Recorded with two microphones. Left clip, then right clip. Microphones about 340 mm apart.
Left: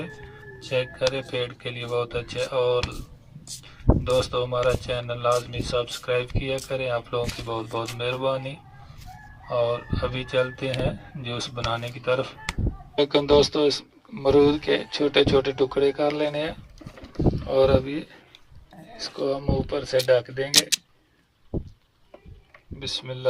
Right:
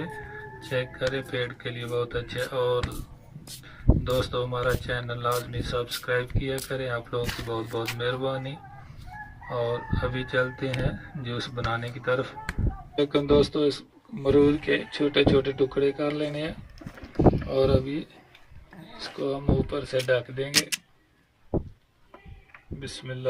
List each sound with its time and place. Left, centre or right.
0.7 s speech: centre
4.0 s speech: centre
13.1 s speech: centre
17.2 s rowboat: right
17.5 s speech: left
19.3 s speech: centre
22.8 s speech: centre